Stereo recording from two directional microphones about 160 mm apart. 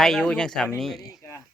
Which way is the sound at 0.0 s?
5° left (ahead or behind).